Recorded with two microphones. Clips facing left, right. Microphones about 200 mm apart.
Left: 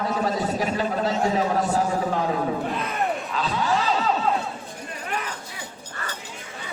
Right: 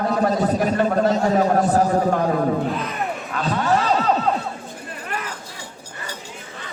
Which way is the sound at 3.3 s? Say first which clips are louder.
Right 6 dB; 55° right (ahead or behind).